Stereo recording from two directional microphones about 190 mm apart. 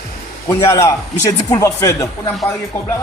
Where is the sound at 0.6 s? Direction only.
15° left (ahead or behind).